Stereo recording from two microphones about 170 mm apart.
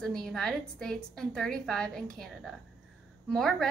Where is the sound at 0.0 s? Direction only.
5° left (ahead or behind).